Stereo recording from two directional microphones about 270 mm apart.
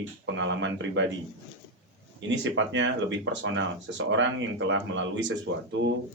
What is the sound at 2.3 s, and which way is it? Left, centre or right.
Speech, right.